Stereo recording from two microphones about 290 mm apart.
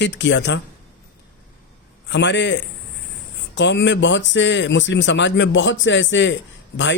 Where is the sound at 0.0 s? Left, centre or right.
Left.